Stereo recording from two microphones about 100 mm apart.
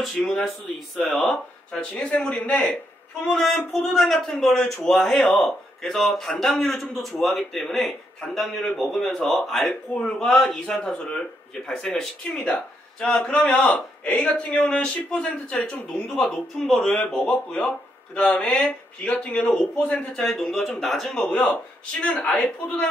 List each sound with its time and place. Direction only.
0.0 s a man's voice: centre (ahead or behind)
3.3 s a man's voice: 5° left (ahead or behind)
21.3 s a man's voice: 15° left (ahead or behind)